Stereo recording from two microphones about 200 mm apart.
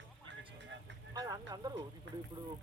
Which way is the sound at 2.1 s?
65° right (ahead or behind).